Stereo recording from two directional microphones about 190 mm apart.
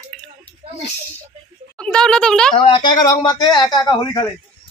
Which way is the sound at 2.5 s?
25° left (ahead or behind).